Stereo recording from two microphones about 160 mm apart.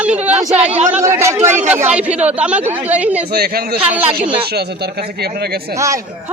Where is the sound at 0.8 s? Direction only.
45° right (ahead or behind).